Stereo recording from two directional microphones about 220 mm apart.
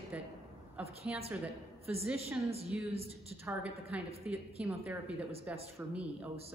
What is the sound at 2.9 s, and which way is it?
Speech, 25° right (ahead or behind).